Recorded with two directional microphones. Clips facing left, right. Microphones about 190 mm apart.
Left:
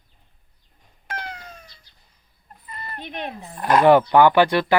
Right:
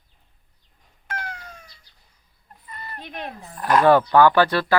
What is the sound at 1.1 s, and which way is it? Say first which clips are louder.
Cat: left 1 dB; 20° left (ahead or behind).